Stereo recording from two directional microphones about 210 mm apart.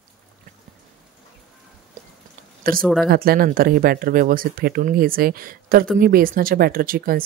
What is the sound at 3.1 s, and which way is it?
Speech, 45° right (ahead or behind).